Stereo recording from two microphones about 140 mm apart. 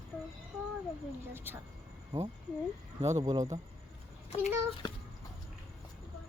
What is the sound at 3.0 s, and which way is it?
Speech, 25° right (ahead or behind).